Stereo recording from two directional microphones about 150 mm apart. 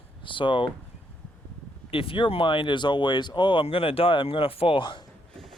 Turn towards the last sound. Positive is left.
turn(degrees=30)  # may be behind; listen again after turning